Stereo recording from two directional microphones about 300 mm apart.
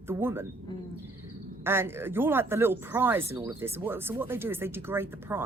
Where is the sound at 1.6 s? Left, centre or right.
Centre.